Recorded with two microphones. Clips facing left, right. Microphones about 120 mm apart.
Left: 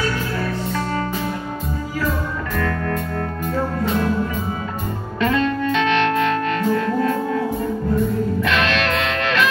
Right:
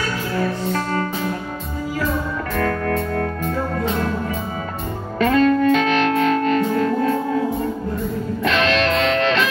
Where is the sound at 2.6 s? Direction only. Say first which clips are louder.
Right 2 dB; 40° right (ahead or behind).